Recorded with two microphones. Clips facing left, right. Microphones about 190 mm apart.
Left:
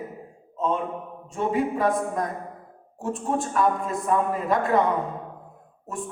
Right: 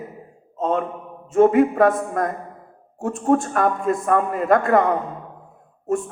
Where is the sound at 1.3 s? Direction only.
55° right (ahead or behind).